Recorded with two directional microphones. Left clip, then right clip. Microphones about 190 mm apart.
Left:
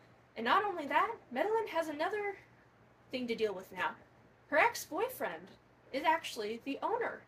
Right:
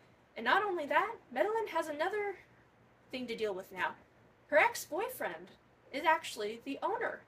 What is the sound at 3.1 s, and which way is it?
A woman's voice, 20° right (ahead or behind).